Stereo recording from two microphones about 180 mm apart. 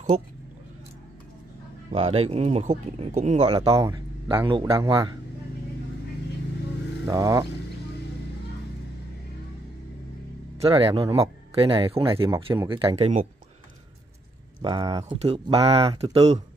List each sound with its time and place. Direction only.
0.1 s speech: 35° right (ahead or behind)
1.9 s speech: 35° right (ahead or behind)
3.4 s a man's voice: 20° right (ahead or behind)
7.1 s a man's voice: 20° right (ahead or behind)
10.7 s a man's voice: 30° right (ahead or behind)
14.6 s a man's voice: 25° right (ahead or behind)